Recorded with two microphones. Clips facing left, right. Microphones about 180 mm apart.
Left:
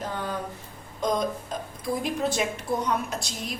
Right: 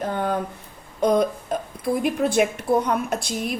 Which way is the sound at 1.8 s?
60° right (ahead or behind).